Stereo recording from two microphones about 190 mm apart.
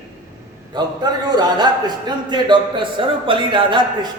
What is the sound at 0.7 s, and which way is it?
A man's voice, 20° right (ahead or behind).